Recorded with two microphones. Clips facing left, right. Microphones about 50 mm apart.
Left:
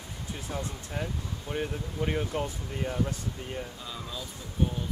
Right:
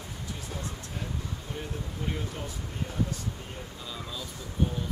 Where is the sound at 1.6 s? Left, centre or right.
Left.